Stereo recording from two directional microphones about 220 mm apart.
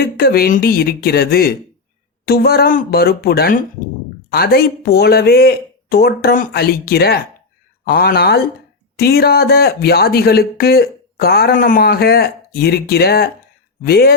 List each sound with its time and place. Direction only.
0.0 s speech: 45° left (ahead or behind)